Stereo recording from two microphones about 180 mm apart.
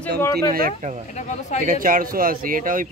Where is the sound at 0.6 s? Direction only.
45° right (ahead or behind).